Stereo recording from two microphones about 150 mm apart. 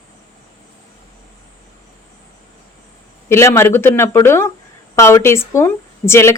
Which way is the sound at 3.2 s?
20° left (ahead or behind).